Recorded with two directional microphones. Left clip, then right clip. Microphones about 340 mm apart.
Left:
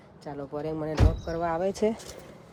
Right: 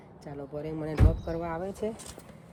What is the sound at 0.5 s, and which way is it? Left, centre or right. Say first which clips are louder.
Speech: left 3 dB; centre.